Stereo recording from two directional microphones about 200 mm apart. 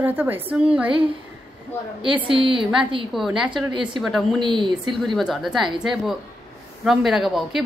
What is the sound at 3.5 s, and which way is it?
Speech, 25° right (ahead or behind).